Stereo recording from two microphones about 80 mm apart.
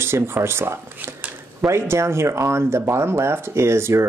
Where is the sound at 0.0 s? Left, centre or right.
Right.